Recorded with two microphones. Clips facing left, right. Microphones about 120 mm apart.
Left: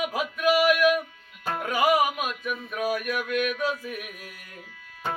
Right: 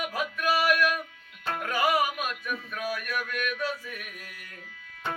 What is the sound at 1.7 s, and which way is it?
Music, 15° left (ahead or behind).